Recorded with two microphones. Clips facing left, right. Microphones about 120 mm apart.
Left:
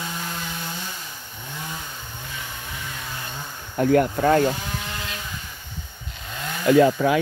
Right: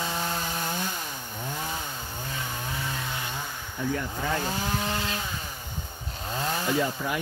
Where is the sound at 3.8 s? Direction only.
65° left (ahead or behind).